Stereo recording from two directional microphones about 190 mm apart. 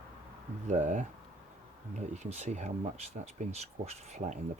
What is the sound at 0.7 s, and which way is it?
Speech, 40° right (ahead or behind).